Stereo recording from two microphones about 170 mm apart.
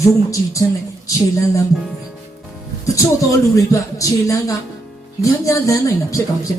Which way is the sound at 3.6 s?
20° left (ahead or behind).